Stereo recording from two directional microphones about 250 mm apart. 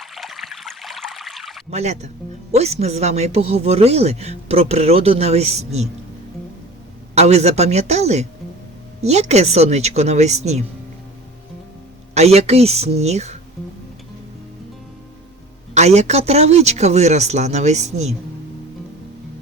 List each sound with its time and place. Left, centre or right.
0.0 s stream: centre
1.7 s speech: right
7.2 s speech: right
12.1 s speech: right
15.7 s speech: right